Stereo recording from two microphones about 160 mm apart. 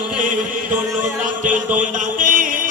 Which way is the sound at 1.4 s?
55° right (ahead or behind).